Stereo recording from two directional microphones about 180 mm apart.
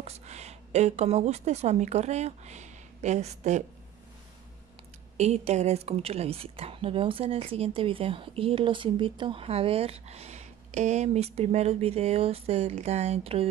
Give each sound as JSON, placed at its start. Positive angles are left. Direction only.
{"t": 0.0, "sound": "a woman's voice", "side_deg": -40}
{"t": 5.1, "sound": "a woman's voice", "side_deg": -35}